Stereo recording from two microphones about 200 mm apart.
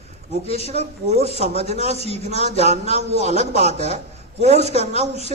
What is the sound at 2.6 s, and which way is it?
A man's voice, 35° right (ahead or behind).